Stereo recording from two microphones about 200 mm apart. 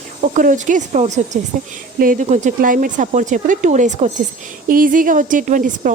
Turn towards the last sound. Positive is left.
turn(degrees=-40)  # may be behind; listen again after turning